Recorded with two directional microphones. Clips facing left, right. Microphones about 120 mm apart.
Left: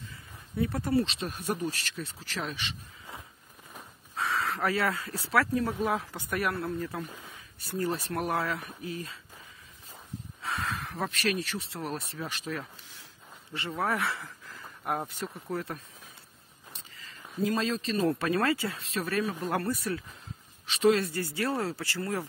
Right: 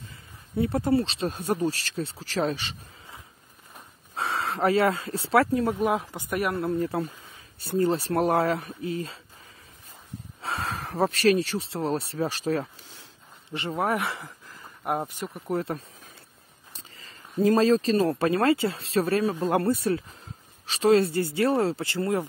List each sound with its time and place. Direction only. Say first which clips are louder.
0.6 s speech: right 4 dB; 25° right (ahead or behind)
4.1 s speech: right 2 dB; 30° right (ahead or behind)
6.6 s speech: right 7 dB; 30° right (ahead or behind)
10.4 s speech: right 3 dB; 30° right (ahead or behind)
13.5 s speech: right 4 dB; 20° right (ahead or behind)
16.7 s speech: right 2 dB; 35° right (ahead or behind)